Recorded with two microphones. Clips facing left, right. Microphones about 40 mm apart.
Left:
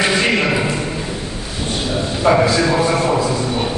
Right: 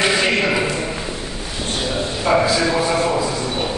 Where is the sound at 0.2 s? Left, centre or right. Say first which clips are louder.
Left 1 dB; centre.